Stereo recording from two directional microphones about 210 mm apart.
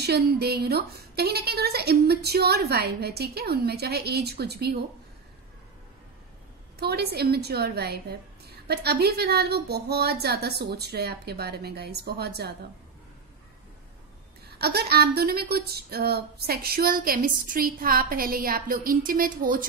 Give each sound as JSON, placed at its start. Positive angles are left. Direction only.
{"t": 0.0, "sound": "speech", "side_deg": -50}
{"t": 6.8, "sound": "speech", "side_deg": -50}
{"t": 14.6, "sound": "speech", "side_deg": -50}